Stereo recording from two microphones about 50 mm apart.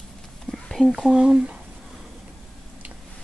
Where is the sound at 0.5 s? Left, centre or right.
Centre.